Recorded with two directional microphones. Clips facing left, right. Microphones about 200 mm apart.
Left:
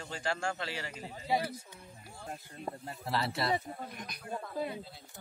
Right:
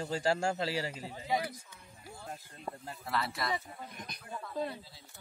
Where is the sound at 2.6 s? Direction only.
25° left (ahead or behind).